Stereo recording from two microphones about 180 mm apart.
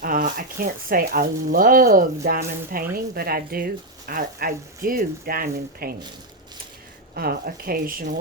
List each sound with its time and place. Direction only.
0.0 s speech: 50° right (ahead or behind)
7.1 s speech: 55° right (ahead or behind)